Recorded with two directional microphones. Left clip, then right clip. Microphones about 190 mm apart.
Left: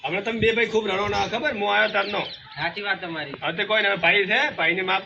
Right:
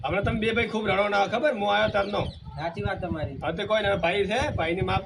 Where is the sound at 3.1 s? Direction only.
10° right (ahead or behind).